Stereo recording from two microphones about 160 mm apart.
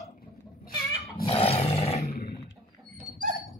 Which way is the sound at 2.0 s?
75° left (ahead or behind).